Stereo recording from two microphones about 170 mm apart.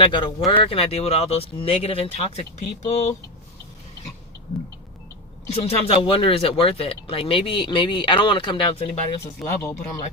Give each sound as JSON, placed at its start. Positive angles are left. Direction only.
{"t": 0.0, "sound": "speech", "side_deg": 30}
{"t": 5.5, "sound": "speech", "side_deg": 35}
{"t": 9.4, "sound": "speech", "side_deg": 0}